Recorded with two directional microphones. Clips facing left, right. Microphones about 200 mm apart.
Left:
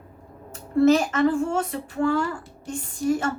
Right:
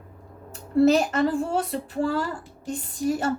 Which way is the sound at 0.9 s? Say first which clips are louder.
Left 4 dB; 35° right (ahead or behind).